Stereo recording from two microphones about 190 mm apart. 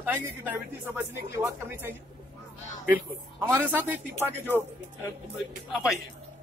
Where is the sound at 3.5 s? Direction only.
10° right (ahead or behind).